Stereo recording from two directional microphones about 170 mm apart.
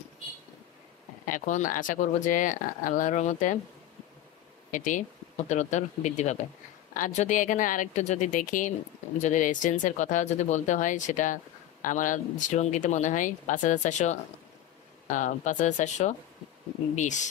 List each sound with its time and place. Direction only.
1.3 s speech: 50° left (ahead or behind)
4.7 s speech: 50° left (ahead or behind)